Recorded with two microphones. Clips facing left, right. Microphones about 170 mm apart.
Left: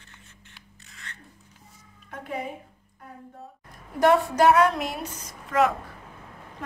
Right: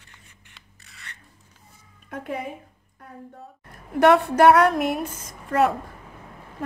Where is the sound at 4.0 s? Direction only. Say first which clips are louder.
Right 3 dB; 60° right (ahead or behind).